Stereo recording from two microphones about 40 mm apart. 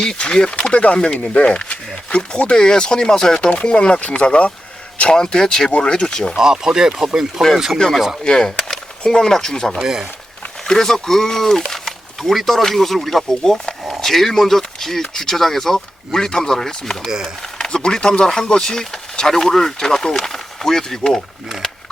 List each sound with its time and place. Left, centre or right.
0.0 s speech: left
0.7 s speech: left
5.1 s speech: centre
6.3 s speech: centre
7.5 s speech: centre
8.2 s speech: left
9.8 s speech: centre
10.7 s speech: centre
12.2 s speech: centre